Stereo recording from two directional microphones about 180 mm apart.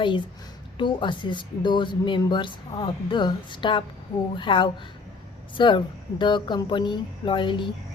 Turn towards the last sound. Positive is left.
turn(degrees=25)  # may be behind; listen again after turning